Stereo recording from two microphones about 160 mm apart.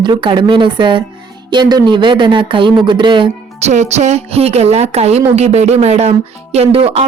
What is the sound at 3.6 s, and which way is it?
A woman's voice, 45° right (ahead or behind).